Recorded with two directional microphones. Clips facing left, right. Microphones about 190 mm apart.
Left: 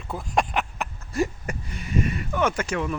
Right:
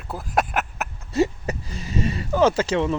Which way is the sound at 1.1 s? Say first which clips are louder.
Right 5 dB; 25° right (ahead or behind).